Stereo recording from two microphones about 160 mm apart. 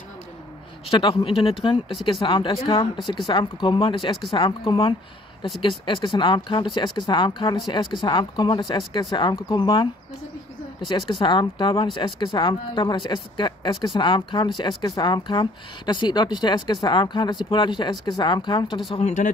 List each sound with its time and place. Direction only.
0.8 s speech: 35° left (ahead or behind)
10.9 s speech: 30° left (ahead or behind)
18.9 s speech: 40° left (ahead or behind)